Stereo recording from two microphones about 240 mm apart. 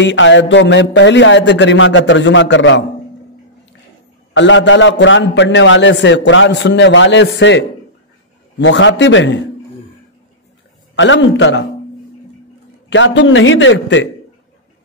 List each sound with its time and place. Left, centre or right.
0.0 s a man's voice: left
4.3 s a man's voice: left
11.0 s a man's voice: left
12.9 s a man's voice: left